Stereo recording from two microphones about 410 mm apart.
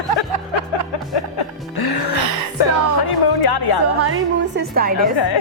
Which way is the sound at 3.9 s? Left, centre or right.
Right.